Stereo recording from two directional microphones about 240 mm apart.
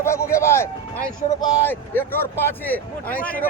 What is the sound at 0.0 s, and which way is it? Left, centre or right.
A man's voice, centre.